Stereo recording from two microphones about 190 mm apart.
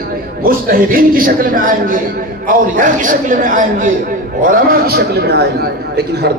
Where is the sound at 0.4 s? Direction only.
50° right (ahead or behind).